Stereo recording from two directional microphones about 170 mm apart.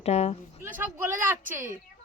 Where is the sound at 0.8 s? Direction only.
10° right (ahead or behind).